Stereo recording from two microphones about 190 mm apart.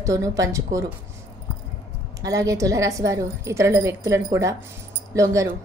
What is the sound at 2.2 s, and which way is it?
A woman's voice, 15° right (ahead or behind).